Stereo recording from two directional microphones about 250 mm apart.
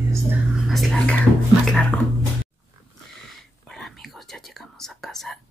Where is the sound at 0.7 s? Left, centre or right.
Centre.